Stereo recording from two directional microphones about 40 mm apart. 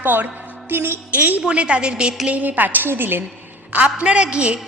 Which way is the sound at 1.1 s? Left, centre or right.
Right.